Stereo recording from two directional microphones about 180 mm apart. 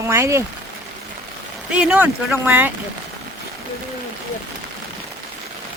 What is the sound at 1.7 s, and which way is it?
Speech, 5° right (ahead or behind).